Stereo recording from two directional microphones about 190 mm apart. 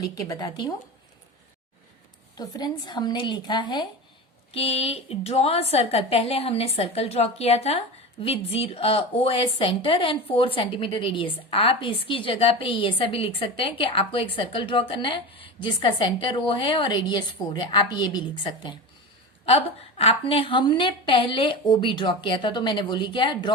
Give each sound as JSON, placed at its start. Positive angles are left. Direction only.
{"t": 0.0, "sound": "a woman's voice", "side_deg": 20}
{"t": 2.3, "sound": "a woman's voice", "side_deg": 20}